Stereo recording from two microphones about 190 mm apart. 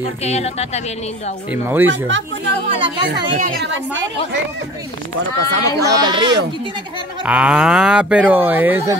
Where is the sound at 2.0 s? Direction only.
75° right (ahead or behind).